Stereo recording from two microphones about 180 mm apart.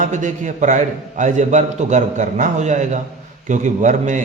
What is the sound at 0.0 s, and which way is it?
A man's voice, 45° right (ahead or behind).